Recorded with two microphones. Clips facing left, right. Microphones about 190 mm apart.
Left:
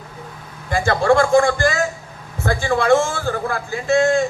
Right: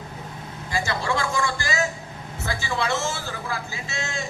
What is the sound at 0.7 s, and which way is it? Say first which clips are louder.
A man's voice: left 10 dB; 55° left (ahead or behind).